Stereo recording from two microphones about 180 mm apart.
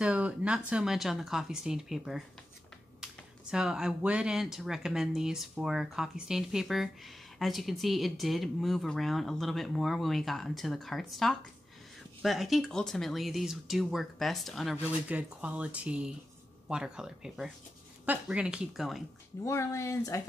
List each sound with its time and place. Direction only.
0.0 s speech: 5° right (ahead or behind)
19.4 s speech: 15° left (ahead or behind)